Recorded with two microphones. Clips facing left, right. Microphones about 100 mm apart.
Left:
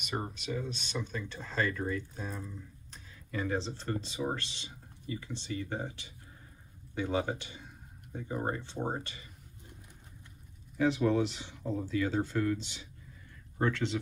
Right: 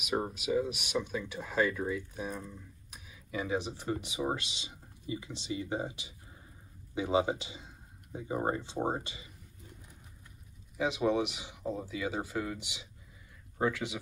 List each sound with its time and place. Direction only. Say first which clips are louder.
0.0 s speech: right 4 dB; 5° right (ahead or behind)
10.8 s speech: left 2 dB; 15° right (ahead or behind)